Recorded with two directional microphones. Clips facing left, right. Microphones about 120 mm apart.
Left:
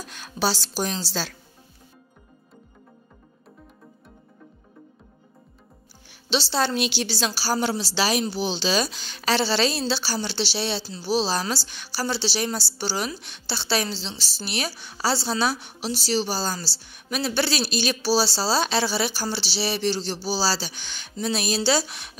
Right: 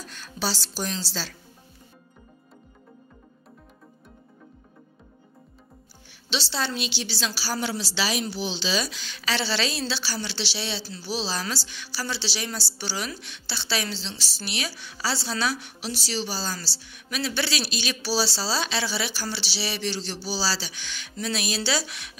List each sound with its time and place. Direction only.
0.1 s a woman's voice: 55° left (ahead or behind)
6.0 s a woman's voice: 40° left (ahead or behind)